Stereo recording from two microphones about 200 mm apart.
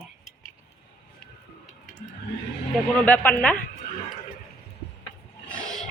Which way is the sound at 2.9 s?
10° left (ahead or behind).